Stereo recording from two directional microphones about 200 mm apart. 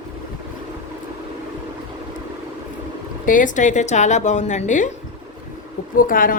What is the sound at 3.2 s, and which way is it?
Speech, 40° left (ahead or behind).